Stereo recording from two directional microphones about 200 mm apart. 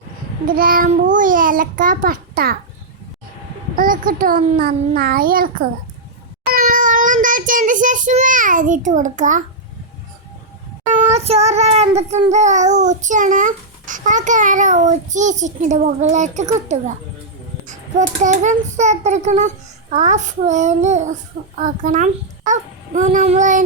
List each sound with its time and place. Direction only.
0.4 s a child's voice: 45° right (ahead or behind)
3.8 s a child's voice: 45° right (ahead or behind)
6.4 s child singing: 45° right (ahead or behind)
10.9 s child singing: 30° right (ahead or behind)
18.2 s child singing: 35° right (ahead or behind)